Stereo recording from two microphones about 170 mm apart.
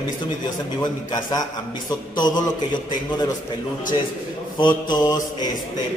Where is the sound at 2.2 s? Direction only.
25° left (ahead or behind).